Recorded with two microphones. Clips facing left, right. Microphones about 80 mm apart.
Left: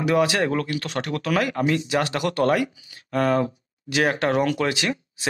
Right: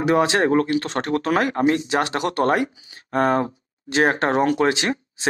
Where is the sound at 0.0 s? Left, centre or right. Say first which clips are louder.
Right 2 dB; right.